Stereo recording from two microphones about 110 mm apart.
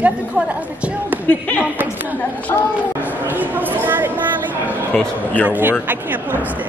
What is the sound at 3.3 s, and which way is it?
Speech, 15° right (ahead or behind).